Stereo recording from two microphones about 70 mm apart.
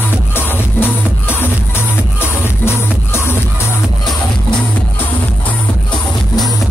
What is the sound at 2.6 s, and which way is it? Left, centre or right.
Music, left.